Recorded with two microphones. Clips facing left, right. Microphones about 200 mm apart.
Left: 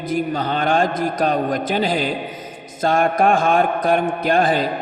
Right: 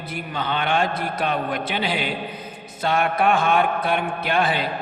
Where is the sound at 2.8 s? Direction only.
45° left (ahead or behind).